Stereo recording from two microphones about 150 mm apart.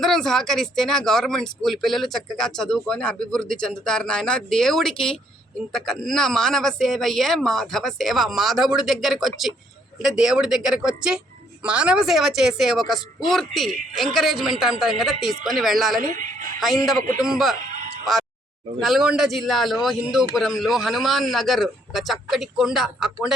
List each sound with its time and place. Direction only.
0.0 s speech: centre (ahead or behind)
16.0 s a woman's voice: 60° right (ahead or behind)
16.6 s speech: centre (ahead or behind)
18.0 s a sound: centre (ahead or behind)
18.8 s speech: centre (ahead or behind)